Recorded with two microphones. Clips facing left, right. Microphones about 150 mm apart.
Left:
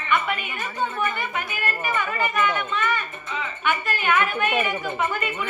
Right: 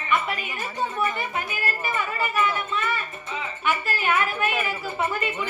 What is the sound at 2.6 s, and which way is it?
A woman's voice, 35° right (ahead or behind).